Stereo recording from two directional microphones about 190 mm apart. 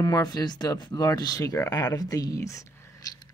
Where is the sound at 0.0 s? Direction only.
20° left (ahead or behind).